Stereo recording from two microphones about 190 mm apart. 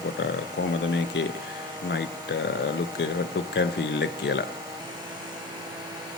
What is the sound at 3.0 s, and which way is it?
Speech, 70° left (ahead or behind).